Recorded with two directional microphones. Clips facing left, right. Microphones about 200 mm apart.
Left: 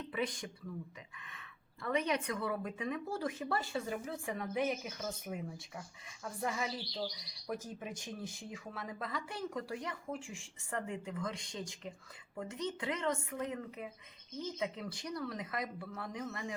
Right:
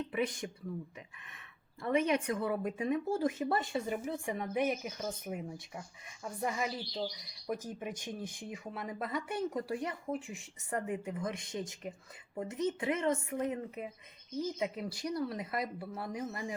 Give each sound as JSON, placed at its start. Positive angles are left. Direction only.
{"t": 0.1, "sound": "speech", "side_deg": -25}
{"t": 1.8, "sound": "speech", "side_deg": -25}
{"t": 15.0, "sound": "speech", "side_deg": -25}